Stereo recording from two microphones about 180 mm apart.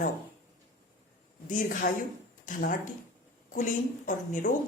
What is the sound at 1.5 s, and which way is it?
A woman's voice, 45° left (ahead or behind).